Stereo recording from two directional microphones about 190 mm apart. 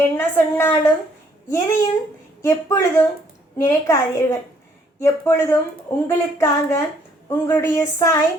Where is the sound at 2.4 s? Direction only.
15° left (ahead or behind).